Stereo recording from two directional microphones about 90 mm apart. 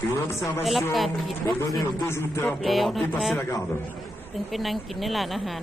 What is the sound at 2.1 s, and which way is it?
Music, 30° left (ahead or behind).